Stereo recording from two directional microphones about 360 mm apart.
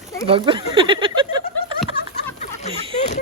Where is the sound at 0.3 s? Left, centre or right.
Centre.